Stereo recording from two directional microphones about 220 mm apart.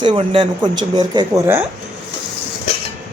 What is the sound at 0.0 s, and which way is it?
Speech, 25° right (ahead or behind).